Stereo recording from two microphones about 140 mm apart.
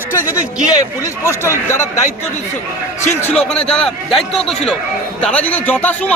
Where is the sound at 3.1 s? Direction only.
15° left (ahead or behind).